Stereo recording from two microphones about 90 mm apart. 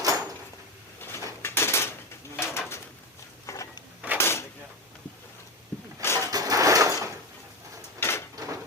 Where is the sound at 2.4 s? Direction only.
30° left (ahead or behind).